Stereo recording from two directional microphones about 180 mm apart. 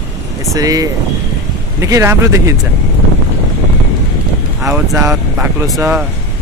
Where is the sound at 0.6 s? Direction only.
20° right (ahead or behind).